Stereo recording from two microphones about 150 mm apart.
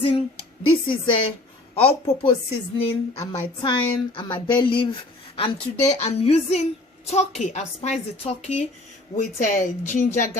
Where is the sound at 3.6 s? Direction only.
35° left (ahead or behind).